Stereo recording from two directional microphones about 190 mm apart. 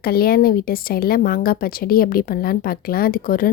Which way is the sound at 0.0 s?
55° left (ahead or behind).